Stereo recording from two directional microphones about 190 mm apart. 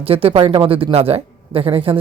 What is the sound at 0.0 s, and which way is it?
Speech, 30° right (ahead or behind).